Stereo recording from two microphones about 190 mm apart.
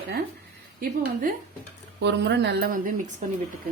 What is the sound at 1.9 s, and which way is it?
Speech, 65° right (ahead or behind).